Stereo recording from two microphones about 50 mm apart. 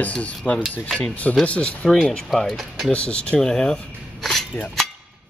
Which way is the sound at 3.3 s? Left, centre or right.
Centre.